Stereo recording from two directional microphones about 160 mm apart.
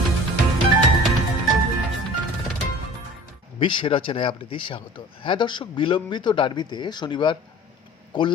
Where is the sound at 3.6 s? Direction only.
30° left (ahead or behind).